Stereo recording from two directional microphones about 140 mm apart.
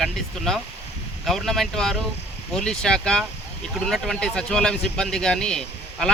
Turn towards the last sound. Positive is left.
turn(degrees=5)  # may be behind; listen again after turning